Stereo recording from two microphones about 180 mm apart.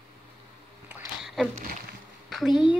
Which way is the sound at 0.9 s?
5° right (ahead or behind).